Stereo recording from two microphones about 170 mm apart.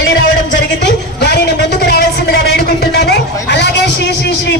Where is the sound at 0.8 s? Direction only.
75° left (ahead or behind).